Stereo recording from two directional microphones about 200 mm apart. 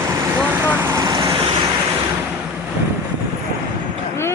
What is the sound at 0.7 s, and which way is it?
Vehicle, 10° right (ahead or behind).